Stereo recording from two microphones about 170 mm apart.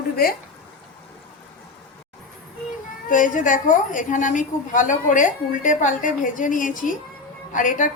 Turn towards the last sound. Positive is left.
turn(degrees=50)  # may be behind; listen again after turning